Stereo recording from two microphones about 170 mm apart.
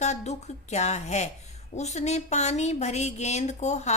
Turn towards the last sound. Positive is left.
turn(degrees=40)  # may be behind; listen again after turning